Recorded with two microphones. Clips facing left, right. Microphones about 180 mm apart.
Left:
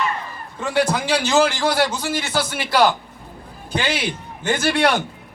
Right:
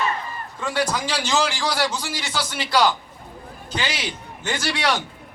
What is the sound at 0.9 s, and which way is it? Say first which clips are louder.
A man's voice: left 4 dB; 55° left (ahead or behind).